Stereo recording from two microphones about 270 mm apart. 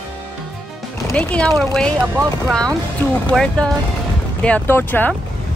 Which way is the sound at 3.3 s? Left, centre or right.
Centre.